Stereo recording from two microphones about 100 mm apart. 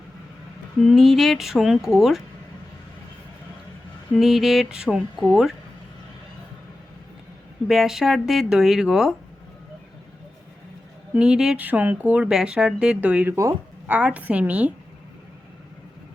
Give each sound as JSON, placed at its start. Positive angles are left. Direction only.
{"t": 0.8, "sound": "speech", "side_deg": 0}
{"t": 4.2, "sound": "speech", "side_deg": 0}
{"t": 7.7, "sound": "speech", "side_deg": -5}
{"t": 11.1, "sound": "speech", "side_deg": -10}
{"t": 13.3, "sound": "speech", "side_deg": -30}
{"t": 13.8, "sound": "speech", "side_deg": -15}